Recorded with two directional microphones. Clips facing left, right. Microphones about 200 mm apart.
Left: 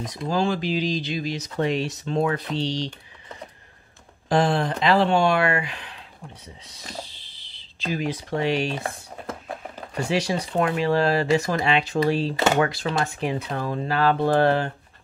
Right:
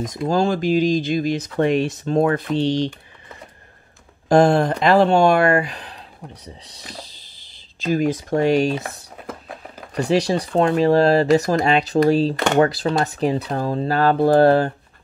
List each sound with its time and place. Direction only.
0.1 s speech: 45° right (ahead or behind)
4.3 s speech: 45° right (ahead or behind)
8.8 s a sound: centre (ahead or behind)
9.9 s speech: 35° right (ahead or behind)